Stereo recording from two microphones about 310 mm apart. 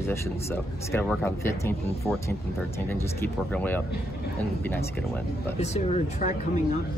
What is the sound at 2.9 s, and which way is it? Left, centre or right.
Speech, centre.